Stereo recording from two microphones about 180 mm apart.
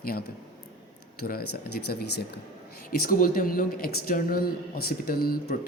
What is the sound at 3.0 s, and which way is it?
A man's voice, 50° left (ahead or behind).